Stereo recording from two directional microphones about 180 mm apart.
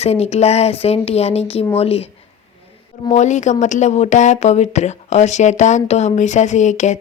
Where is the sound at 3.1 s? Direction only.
40° left (ahead or behind).